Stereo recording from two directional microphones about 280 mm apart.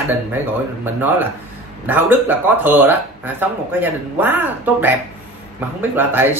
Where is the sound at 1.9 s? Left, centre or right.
Centre.